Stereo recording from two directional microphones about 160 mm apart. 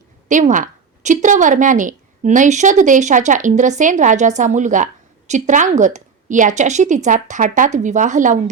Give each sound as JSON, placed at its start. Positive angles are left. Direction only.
{"t": 0.3, "sound": "a woman's voice", "side_deg": -55}